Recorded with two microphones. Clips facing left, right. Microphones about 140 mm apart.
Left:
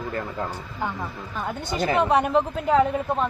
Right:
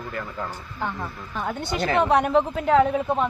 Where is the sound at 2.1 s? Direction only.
Centre (ahead or behind).